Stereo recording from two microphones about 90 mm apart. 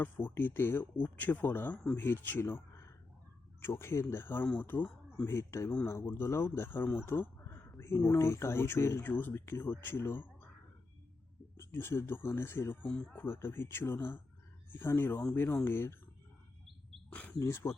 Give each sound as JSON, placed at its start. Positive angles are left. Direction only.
{"t": 0.0, "sound": "speech", "side_deg": 20}
{"t": 11.5, "sound": "speech", "side_deg": 25}
{"t": 12.9, "sound": "speech", "side_deg": 10}
{"t": 13.1, "sound": "speech", "side_deg": 25}
{"t": 17.1, "sound": "wild animals", "side_deg": 15}
{"t": 17.4, "sound": "speech", "side_deg": 30}